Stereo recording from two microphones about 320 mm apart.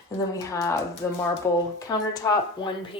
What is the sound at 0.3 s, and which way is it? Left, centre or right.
Speech, centre.